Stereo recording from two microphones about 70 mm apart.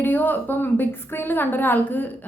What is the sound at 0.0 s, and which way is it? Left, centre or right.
A woman's voice, left.